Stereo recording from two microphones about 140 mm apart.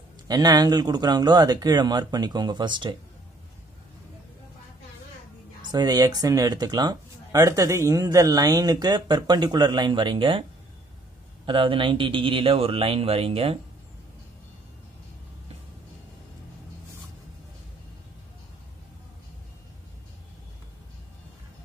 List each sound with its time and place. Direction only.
0.3 s speech: 30° right (ahead or behind)
5.7 s speech: 30° right (ahead or behind)
11.4 s speech: 40° right (ahead or behind)